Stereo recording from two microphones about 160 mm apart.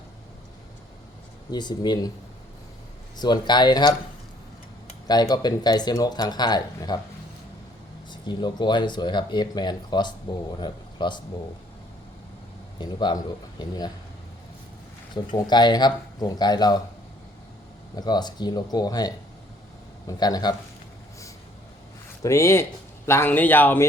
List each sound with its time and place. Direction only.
1.5 s speech: 25° left (ahead or behind)
3.2 s speech: 25° left (ahead or behind)
5.0 s speech: 25° left (ahead or behind)
8.1 s speech: 30° left (ahead or behind)
12.8 s speech: 30° left (ahead or behind)
15.1 s speech: 25° left (ahead or behind)
17.9 s speech: 25° left (ahead or behind)
22.2 s speech: 20° left (ahead or behind)